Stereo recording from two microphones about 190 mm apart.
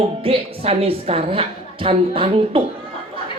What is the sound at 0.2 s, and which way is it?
A woman's voice, 30° right (ahead or behind).